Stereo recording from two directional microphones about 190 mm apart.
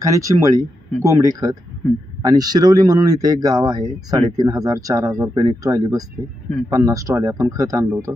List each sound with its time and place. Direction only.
0.0 s speech: 15° right (ahead or behind)